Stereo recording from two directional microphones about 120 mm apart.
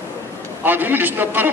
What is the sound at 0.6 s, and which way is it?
Speech, 15° right (ahead or behind).